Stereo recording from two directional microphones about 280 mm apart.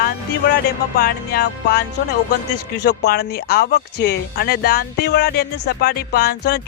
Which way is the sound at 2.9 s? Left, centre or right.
Left.